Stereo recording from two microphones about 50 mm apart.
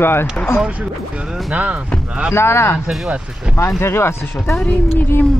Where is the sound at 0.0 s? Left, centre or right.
Left.